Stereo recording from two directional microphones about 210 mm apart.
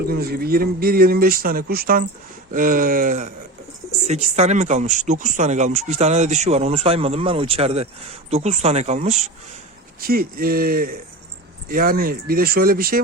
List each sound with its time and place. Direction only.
0.0 s speech: 45° right (ahead or behind)
10.0 s speech: 45° right (ahead or behind)